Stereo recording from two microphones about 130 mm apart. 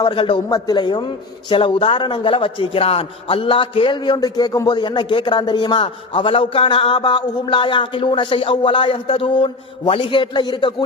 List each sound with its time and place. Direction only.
0.0 s a man's voice: 40° left (ahead or behind)